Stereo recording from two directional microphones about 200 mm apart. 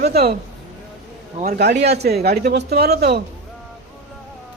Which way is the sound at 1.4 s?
55° right (ahead or behind).